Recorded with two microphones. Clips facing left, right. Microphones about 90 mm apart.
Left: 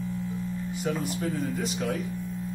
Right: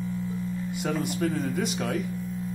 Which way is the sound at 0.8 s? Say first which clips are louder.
Right 2 dB; 65° right (ahead or behind).